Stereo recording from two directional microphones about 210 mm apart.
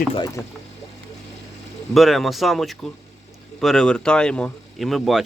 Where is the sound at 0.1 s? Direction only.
20° left (ahead or behind).